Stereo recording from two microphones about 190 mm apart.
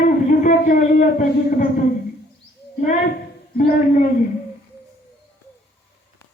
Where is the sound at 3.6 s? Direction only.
45° left (ahead or behind).